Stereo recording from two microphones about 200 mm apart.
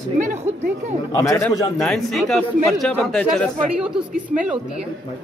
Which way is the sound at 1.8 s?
Centre (ahead or behind).